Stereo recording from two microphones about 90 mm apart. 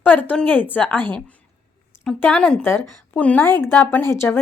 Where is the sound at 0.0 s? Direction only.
20° left (ahead or behind).